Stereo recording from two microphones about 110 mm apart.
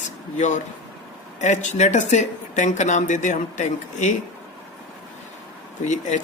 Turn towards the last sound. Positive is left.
turn(degrees=90)